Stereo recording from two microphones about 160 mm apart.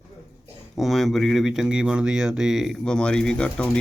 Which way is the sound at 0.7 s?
Centre (ahead or behind).